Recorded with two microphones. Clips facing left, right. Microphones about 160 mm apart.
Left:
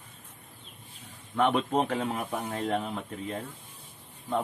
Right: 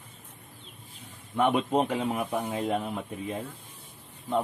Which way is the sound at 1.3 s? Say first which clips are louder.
Right 1 dB; 10° right (ahead or behind).